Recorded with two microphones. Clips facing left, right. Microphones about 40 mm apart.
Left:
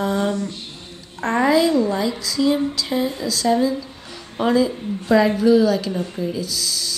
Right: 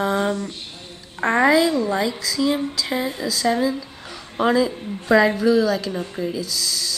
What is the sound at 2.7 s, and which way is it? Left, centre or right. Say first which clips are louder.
Speech: left 2 dB; right.